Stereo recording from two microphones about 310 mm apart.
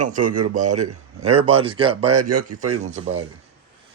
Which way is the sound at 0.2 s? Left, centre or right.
Right.